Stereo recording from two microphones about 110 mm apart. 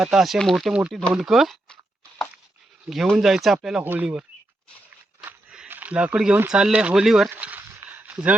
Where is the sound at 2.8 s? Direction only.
Centre (ahead or behind).